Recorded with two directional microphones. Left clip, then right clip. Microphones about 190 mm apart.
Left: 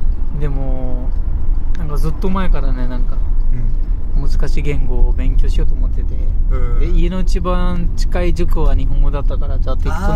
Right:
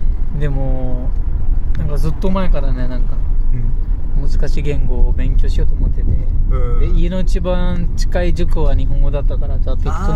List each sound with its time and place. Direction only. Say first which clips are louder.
0.4 s speech: right 2 dB; 5° right (ahead or behind)
1.9 s speech: right 1 dB; centre (ahead or behind)
4.2 s speech: even; 5° left (ahead or behind)
6.5 s speech: right 3 dB; 40° left (ahead or behind)
6.8 s speech: even; 5° left (ahead or behind)
9.8 s speech: left 1 dB; 40° left (ahead or behind)